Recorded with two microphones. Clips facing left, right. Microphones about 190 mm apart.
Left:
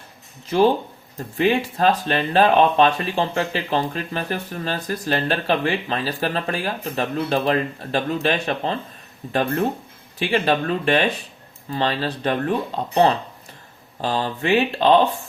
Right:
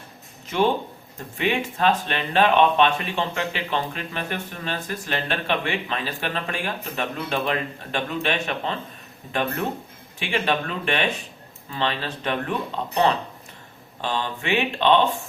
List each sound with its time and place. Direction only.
0.4 s speech: 35° left (ahead or behind)